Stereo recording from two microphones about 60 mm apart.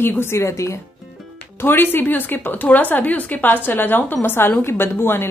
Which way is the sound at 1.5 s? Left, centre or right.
Left.